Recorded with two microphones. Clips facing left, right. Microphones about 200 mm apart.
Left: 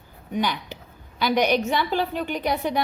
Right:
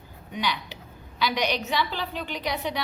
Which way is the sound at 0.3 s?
50° left (ahead or behind).